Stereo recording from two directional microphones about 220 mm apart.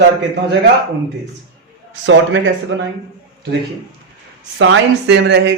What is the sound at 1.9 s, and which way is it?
Speech, 60° right (ahead or behind).